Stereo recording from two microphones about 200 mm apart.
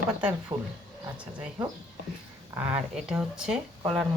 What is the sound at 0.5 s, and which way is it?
Speech, 20° right (ahead or behind).